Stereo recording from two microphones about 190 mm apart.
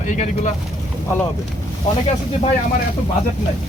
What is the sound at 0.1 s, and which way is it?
Speech, 40° left (ahead or behind).